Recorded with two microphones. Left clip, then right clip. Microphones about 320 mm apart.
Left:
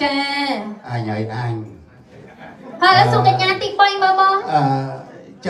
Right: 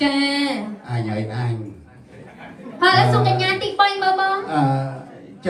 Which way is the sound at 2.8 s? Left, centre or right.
Centre.